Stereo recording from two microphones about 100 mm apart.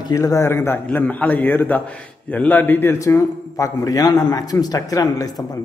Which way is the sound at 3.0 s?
30° left (ahead or behind).